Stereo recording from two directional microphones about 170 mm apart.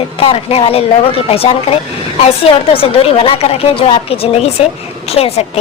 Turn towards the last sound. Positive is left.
turn(degrees=35)  # may be behind; listen again after turning